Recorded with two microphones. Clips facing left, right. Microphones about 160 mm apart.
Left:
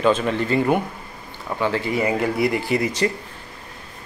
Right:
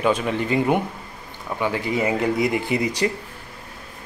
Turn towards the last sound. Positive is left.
turn(degrees=-15)  # may be behind; listen again after turning